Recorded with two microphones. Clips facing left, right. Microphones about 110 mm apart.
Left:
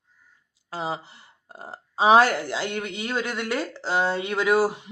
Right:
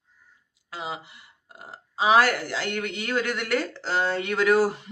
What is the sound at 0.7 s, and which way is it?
Speech, 35° left (ahead or behind).